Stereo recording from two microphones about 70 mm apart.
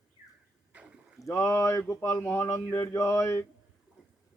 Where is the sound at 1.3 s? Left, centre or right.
Left.